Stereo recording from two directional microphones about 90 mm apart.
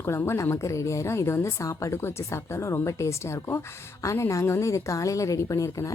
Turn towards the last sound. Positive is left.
turn(degrees=35)  # may be behind; listen again after turning